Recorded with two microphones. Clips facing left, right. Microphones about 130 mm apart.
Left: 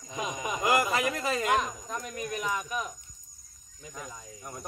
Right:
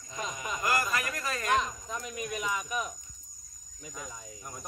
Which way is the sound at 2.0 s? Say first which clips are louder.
Left 1 dB; 40° left (ahead or behind).